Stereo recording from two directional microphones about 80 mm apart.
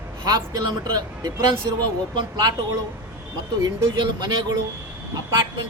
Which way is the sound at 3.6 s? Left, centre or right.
Right.